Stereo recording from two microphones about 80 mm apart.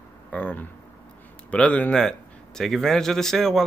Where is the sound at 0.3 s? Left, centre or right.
Centre.